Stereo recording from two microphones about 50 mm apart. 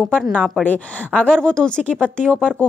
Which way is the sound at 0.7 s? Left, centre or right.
Left.